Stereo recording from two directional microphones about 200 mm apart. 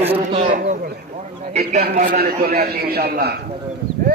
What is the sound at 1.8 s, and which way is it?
A man's voice, 45° right (ahead or behind).